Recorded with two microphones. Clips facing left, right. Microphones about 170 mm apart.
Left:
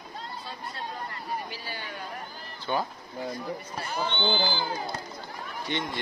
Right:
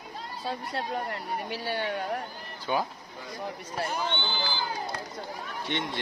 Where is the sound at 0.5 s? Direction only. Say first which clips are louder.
Right 9 dB; 75° right (ahead or behind).